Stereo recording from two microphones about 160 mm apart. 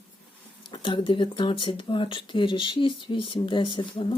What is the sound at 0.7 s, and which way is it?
Speech, 30° left (ahead or behind).